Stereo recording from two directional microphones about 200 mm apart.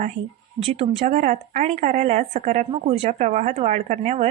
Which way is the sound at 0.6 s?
30° right (ahead or behind).